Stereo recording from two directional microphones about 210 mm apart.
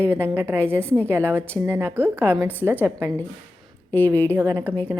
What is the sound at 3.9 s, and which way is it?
Speech, 10° left (ahead or behind).